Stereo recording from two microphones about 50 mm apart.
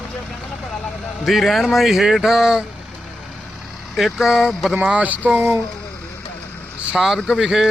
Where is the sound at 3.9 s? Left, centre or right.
Centre.